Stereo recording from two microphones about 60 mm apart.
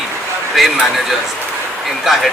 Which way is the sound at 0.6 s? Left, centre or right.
Centre.